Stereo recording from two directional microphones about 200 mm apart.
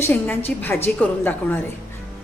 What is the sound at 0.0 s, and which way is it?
A woman's voice, 10° left (ahead or behind).